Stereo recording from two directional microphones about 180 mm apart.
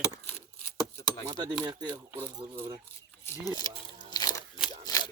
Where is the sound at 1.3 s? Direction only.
20° right (ahead or behind).